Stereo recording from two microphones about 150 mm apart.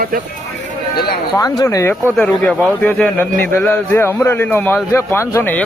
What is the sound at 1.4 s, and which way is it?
Speech, 20° left (ahead or behind).